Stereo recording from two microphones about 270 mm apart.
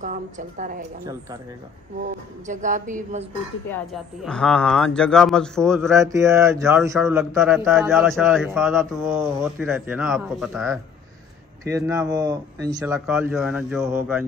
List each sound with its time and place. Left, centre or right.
0.0 s speech: right
2.4 s speech: right
3.7 s speech: centre
5.9 s speech: centre